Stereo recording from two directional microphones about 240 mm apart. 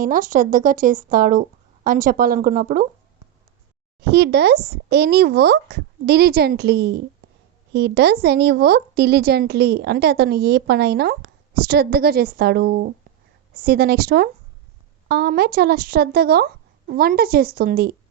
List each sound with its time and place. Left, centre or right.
0.0 s a woman's voice: right
4.0 s a woman's voice: right